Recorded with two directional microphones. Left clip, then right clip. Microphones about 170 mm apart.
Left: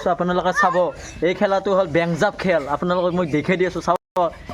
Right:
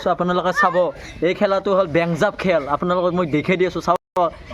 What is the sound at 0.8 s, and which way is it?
A man's voice, 10° right (ahead or behind).